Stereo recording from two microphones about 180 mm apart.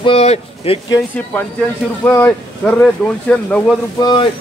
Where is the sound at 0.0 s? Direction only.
35° left (ahead or behind).